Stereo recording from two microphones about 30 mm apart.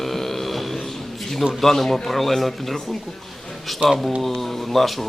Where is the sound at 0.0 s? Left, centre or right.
Centre.